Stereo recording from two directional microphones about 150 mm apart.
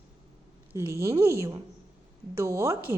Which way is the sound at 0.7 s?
20° right (ahead or behind).